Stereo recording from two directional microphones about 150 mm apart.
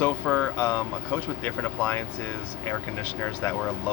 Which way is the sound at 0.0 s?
10° left (ahead or behind).